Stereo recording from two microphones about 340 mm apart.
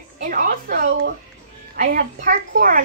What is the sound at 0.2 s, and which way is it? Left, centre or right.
A woman's voice, right.